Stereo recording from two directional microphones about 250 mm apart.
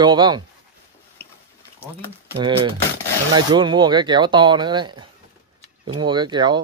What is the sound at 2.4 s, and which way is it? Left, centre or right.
Speech, right.